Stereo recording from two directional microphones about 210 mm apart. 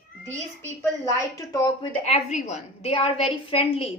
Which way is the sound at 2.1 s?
30° left (ahead or behind).